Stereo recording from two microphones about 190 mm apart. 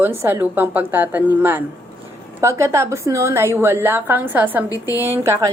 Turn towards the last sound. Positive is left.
turn(degrees=-15)  # may be behind; listen again after turning